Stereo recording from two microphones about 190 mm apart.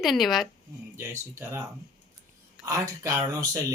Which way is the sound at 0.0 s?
Centre (ahead or behind).